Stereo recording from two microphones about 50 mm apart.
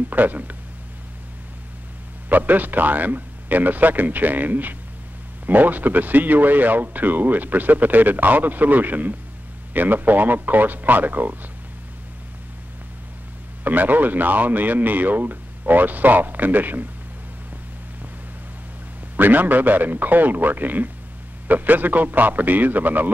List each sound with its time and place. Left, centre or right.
0.1 s speech: right
2.2 s speech: right
13.7 s speech: right
19.1 s speech: right